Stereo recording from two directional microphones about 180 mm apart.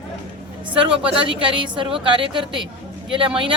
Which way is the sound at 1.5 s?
25° right (ahead or behind).